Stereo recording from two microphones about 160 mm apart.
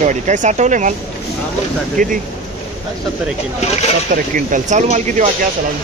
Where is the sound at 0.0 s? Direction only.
50° right (ahead or behind).